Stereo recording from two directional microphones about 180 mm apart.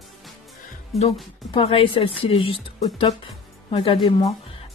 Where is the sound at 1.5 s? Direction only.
30° left (ahead or behind).